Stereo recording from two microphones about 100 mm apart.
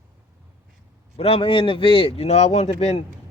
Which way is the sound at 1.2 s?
80° left.